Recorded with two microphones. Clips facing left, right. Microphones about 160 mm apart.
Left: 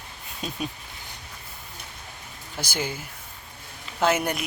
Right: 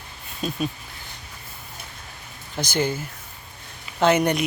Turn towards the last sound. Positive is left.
turn(degrees=5)  # may be behind; listen again after turning